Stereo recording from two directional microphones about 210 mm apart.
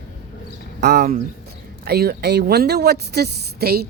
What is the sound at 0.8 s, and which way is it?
Speech, 50° right (ahead or behind).